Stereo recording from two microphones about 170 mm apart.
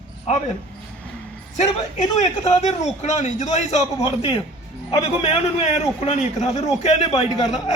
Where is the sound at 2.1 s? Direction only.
40° left (ahead or behind).